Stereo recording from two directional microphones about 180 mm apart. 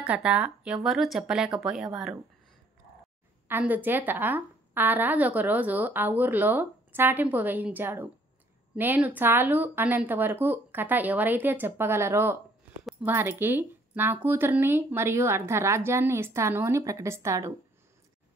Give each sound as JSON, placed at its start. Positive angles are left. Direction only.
{"t": 0.0, "sound": "speech", "side_deg": -5}
{"t": 3.4, "sound": "speech", "side_deg": -10}